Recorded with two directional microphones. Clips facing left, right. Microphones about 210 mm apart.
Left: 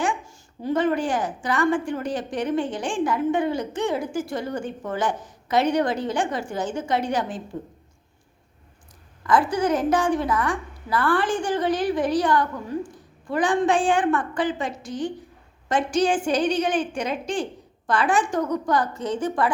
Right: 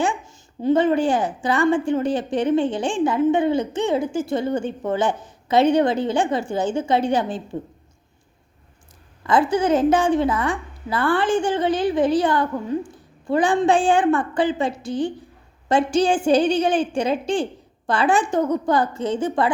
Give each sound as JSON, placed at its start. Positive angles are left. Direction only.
{"t": 0.0, "sound": "a woman's voice", "side_deg": -25}
{"t": 9.2, "sound": "a woman's voice", "side_deg": -25}